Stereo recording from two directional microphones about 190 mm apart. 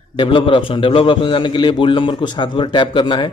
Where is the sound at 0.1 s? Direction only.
25° left (ahead or behind).